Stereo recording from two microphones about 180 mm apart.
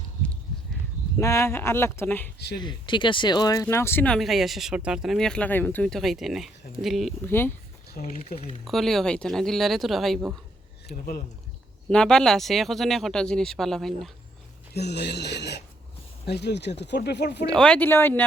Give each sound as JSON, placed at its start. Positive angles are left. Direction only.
{"t": 1.2, "sound": "speech", "side_deg": 15}
{"t": 2.6, "sound": "speech", "side_deg": 25}
{"t": 7.3, "sound": "speech", "side_deg": 10}
{"t": 8.0, "sound": "speech", "side_deg": 40}
{"t": 8.6, "sound": "speech", "side_deg": 0}
{"t": 10.8, "sound": "speech", "side_deg": 55}
{"t": 11.9, "sound": "speech", "side_deg": 5}
{"t": 14.7, "sound": "speech", "side_deg": 65}
{"t": 17.4, "sound": "speech", "side_deg": 5}